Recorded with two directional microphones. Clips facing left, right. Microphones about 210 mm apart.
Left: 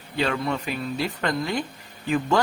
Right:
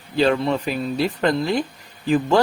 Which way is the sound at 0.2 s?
30° right (ahead or behind).